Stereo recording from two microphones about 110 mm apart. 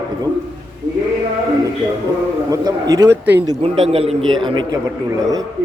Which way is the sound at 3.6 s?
65° right (ahead or behind).